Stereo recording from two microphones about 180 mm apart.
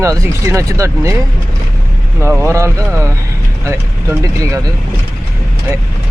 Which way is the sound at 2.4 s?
15° right (ahead or behind).